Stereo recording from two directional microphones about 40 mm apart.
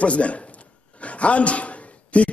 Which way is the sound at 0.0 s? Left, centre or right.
Left.